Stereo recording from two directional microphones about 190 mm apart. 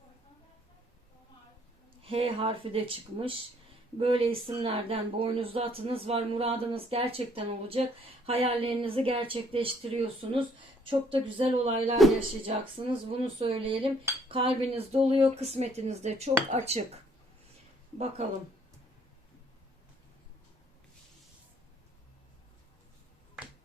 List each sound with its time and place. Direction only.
2.0 s speech: 30° right (ahead or behind)